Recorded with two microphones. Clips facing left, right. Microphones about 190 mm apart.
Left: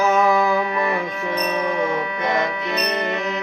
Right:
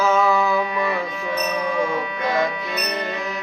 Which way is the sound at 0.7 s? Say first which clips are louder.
Left 1 dB; 50° left (ahead or behind).